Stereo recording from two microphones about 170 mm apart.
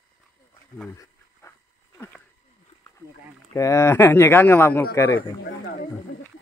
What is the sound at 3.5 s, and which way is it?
Speech, 15° left (ahead or behind).